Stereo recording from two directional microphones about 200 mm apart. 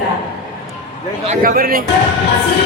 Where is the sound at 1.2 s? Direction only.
35° right (ahead or behind).